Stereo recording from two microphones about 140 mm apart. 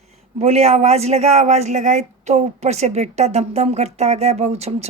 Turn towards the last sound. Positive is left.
turn(degrees=-50)  # may be behind; listen again after turning